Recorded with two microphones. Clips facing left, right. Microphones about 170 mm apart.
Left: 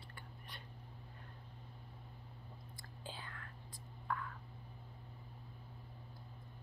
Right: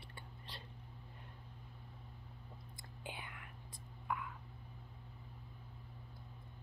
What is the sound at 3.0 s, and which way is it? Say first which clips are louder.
Whispering: right 1 dB; 20° right (ahead or behind).